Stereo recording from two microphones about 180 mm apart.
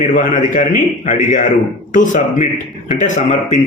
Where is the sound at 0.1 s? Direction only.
45° left (ahead or behind).